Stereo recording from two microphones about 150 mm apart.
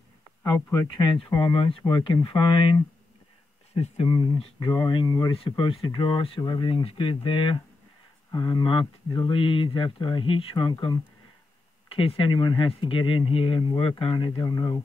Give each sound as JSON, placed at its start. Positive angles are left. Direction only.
{"t": 0.4, "sound": "speech", "side_deg": 20}
{"t": 1.3, "sound": "speech", "side_deg": 35}
{"t": 4.1, "sound": "speech", "side_deg": 30}
{"t": 5.4, "sound": "speech", "side_deg": 35}